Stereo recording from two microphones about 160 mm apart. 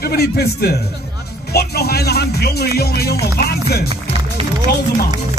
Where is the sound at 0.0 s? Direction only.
80° left.